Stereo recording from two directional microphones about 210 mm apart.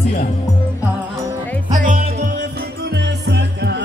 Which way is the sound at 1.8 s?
40° right (ahead or behind).